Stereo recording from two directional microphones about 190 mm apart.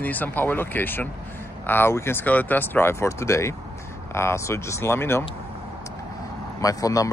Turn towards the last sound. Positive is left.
turn(degrees=20)  # may be behind; listen again after turning